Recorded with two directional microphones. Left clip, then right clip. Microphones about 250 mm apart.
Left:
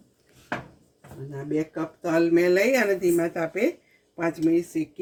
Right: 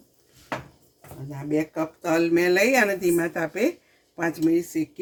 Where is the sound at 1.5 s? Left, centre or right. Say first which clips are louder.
Right 3 dB; right.